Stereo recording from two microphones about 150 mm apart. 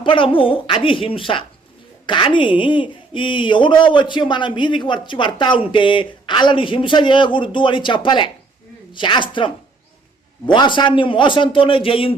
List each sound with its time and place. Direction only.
0.0 s speech: 35° left (ahead or behind)